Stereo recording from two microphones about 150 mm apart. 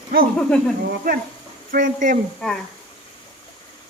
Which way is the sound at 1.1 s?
90° right.